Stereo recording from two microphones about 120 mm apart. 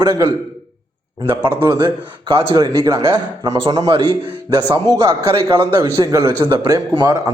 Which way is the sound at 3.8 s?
40° right (ahead or behind).